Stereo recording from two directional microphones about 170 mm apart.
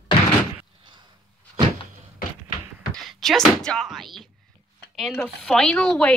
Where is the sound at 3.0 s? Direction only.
Centre (ahead or behind).